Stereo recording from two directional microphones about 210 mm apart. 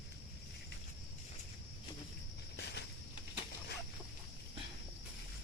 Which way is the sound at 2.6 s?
55° left (ahead or behind).